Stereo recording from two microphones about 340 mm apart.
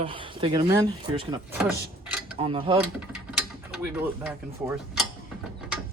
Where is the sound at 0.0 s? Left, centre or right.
Centre.